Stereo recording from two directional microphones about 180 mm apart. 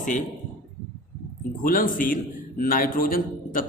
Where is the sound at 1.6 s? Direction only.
50° left (ahead or behind).